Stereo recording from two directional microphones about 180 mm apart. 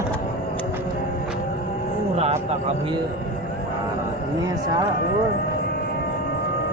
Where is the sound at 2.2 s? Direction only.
35° right (ahead or behind).